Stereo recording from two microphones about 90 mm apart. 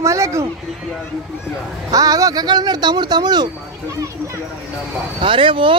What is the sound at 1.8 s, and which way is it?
Speech, 40° right (ahead or behind).